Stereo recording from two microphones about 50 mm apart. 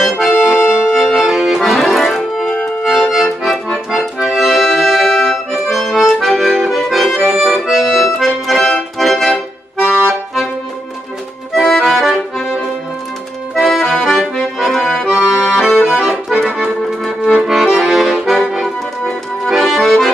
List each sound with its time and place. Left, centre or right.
0.0 s accordion: centre
0.8 s accordion: centre
8.9 s organ: centre
9.8 s accordion: left
11.5 s accordion: centre
13.6 s accordion: centre
15.1 s accordion: left
15.5 s accordion: centre